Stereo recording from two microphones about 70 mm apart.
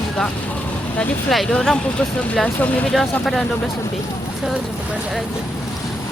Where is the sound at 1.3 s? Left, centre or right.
Centre.